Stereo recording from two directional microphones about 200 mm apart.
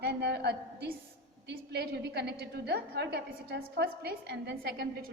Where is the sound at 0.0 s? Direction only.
55° right (ahead or behind).